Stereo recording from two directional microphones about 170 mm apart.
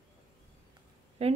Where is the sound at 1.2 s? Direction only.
35° right (ahead or behind).